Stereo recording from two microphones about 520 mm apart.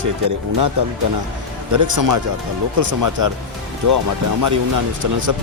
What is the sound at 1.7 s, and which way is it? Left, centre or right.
Speech, right.